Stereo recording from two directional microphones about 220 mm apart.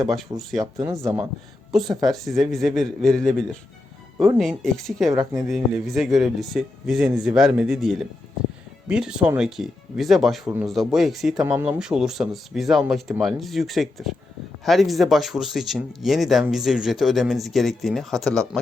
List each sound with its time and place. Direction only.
0.5 s speech: 15° right (ahead or behind)
1.7 s speech: centre (ahead or behind)
4.4 s speech: centre (ahead or behind)
5.1 s speech: 15° right (ahead or behind)
5.4 s speech: centre (ahead or behind)